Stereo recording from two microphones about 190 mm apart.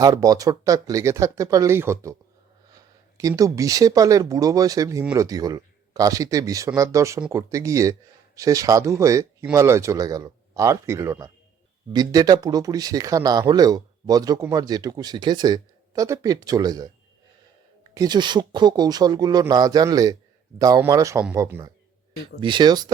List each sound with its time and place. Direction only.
0.0 s speech: 20° right (ahead or behind)
17.9 s speech: 20° right (ahead or behind)